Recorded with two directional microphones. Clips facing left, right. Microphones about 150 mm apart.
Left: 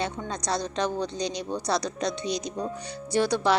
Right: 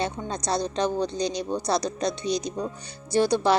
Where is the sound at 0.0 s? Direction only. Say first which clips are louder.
Right 2 dB; 25° right (ahead or behind).